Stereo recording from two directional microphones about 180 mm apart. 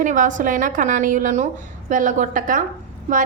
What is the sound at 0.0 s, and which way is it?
A woman's voice, 45° right (ahead or behind).